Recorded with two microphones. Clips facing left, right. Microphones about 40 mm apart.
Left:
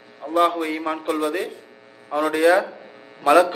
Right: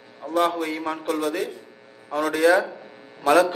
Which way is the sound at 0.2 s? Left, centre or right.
Centre.